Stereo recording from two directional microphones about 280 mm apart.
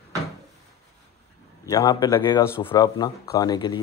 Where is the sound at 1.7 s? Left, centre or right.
Centre.